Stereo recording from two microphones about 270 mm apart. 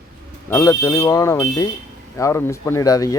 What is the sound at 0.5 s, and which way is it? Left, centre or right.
Speech, centre.